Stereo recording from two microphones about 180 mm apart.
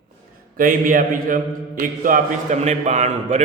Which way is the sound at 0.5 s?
50° right (ahead or behind).